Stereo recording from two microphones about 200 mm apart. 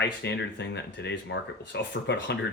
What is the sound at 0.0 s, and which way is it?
Speech, 60° left (ahead or behind).